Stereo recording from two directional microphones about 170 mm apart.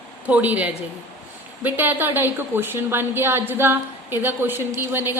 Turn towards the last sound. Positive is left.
turn(degrees=-15)  # may be behind; listen again after turning